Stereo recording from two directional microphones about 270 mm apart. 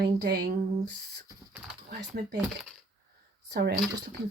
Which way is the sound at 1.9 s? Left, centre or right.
Right.